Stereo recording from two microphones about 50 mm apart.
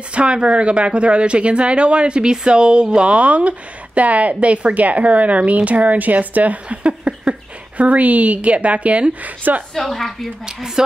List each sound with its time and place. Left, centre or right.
0.1 s speech: right
9.8 s a woman's voice: centre